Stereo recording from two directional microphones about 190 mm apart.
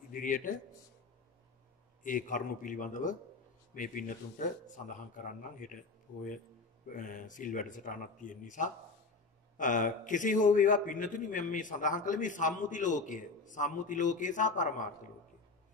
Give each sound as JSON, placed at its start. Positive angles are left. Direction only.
{"t": 0.1, "sound": "a man's voice", "side_deg": 45}
{"t": 2.0, "sound": "a man's voice", "side_deg": 45}